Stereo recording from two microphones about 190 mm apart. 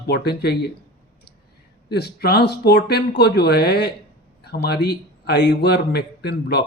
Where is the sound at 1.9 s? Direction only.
55° left (ahead or behind).